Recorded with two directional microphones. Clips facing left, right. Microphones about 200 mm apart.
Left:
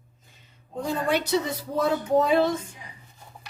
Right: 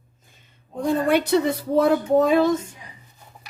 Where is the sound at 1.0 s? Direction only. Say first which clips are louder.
Right 5 dB; 55° right (ahead or behind).